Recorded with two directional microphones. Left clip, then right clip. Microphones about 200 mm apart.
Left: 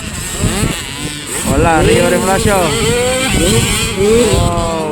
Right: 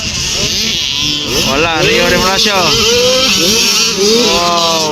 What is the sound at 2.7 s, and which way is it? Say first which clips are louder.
Speech: right 4 dB; 20° left (ahead or behind).